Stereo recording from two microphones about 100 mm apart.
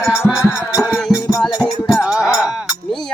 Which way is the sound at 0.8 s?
10° right (ahead or behind).